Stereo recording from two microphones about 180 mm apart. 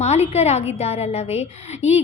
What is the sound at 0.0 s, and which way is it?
A woman's voice, 35° left (ahead or behind).